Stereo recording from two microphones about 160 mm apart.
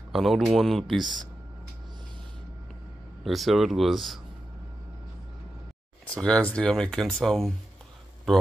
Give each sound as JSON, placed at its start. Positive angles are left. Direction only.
{"t": 0.1, "sound": "speech", "side_deg": 0}
{"t": 1.0, "sound": "speech", "side_deg": -30}
{"t": 3.3, "sound": "speech", "side_deg": 0}
{"t": 6.0, "sound": "speech", "side_deg": 5}